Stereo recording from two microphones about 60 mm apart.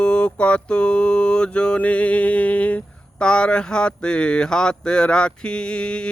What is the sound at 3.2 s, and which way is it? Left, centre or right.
Speech, centre.